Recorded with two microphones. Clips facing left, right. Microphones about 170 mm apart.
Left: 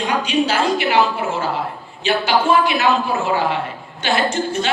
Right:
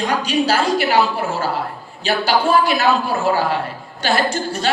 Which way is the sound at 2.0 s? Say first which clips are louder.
Left 1 dB; 40° right (ahead or behind).